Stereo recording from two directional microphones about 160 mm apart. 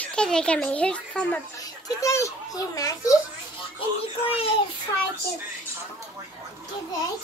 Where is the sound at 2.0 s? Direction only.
20° left (ahead or behind).